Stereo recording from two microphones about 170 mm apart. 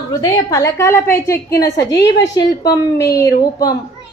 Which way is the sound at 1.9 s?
90° left.